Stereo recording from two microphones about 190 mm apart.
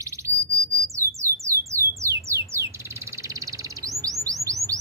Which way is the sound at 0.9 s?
15° right (ahead or behind).